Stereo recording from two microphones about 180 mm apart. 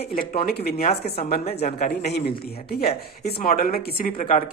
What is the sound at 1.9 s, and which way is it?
A man's voice, 65° left (ahead or behind).